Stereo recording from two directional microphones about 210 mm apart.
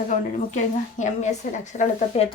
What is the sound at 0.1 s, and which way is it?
Speech, 35° left (ahead or behind).